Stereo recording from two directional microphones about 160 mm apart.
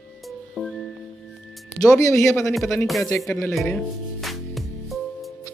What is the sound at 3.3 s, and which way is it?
Speech, 15° left (ahead or behind).